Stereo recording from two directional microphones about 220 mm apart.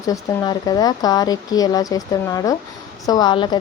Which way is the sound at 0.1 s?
15° left (ahead or behind).